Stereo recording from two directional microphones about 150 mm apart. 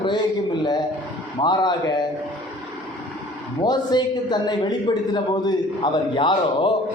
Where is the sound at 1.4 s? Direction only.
30° left (ahead or behind).